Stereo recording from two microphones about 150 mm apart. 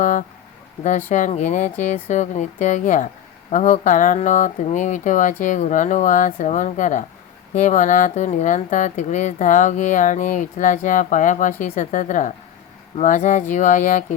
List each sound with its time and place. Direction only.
0.0 s speech: 55° left (ahead or behind)